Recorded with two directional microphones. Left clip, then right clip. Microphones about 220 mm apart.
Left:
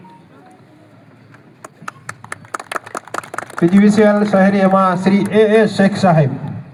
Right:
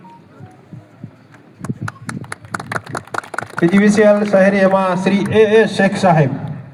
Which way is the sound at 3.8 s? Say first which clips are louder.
Right 2 dB; 45° left (ahead or behind).